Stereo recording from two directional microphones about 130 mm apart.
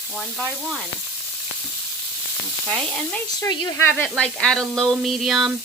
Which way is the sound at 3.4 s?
35° left (ahead or behind).